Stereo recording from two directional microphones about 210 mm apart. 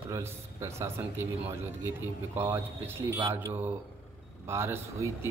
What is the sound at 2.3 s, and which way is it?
A man's voice, 10° right (ahead or behind).